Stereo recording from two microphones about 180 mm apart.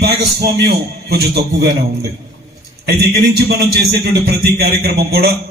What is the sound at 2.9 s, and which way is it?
A man's voice, 60° right (ahead or behind).